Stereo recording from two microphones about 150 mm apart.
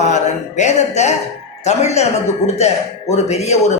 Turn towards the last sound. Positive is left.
turn(degrees=45)  # may be behind; listen again after turning